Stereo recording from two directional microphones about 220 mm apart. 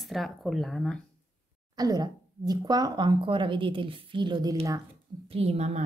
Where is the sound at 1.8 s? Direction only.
15° right (ahead or behind).